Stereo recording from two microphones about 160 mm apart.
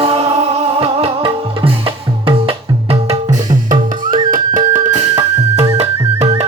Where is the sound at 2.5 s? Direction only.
35° right (ahead or behind).